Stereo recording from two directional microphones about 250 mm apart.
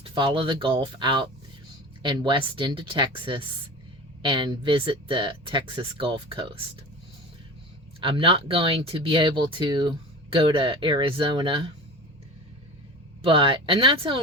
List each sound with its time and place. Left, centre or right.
0.0 s speech: centre
8.0 s speech: right
13.2 s speech: right